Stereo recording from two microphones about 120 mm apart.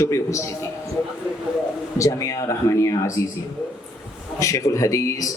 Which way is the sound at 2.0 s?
25° left (ahead or behind).